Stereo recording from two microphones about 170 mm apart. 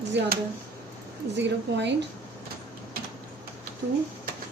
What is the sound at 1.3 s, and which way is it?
Speech, 90° right.